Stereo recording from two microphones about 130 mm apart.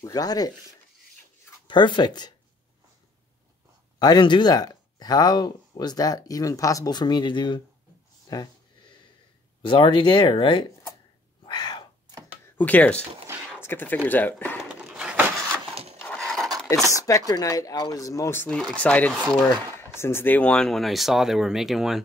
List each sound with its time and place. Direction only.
0.0 s speech: 30° left (ahead or behind)
4.0 s speech: 35° left (ahead or behind)
9.7 s speech: 40° left (ahead or behind)
11.4 s a sound: 35° left (ahead or behind)
12.5 s speech: 10° left (ahead or behind)
14.6 s a sound: 5° right (ahead or behind)
15.7 s wood: 50° right (ahead or behind)
16.0 s a sound: 10° left (ahead or behind)
16.9 s speech: 25° left (ahead or behind); by 22.0 s 5° right (ahead or behind)